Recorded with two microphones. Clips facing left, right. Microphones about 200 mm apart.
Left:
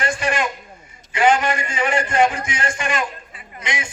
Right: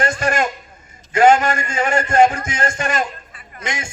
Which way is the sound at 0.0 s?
45° right (ahead or behind).